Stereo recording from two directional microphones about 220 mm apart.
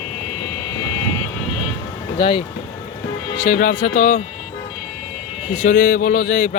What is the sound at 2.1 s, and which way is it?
Speech, 20° left (ahead or behind).